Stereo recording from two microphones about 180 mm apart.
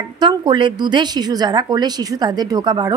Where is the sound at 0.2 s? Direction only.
25° right (ahead or behind).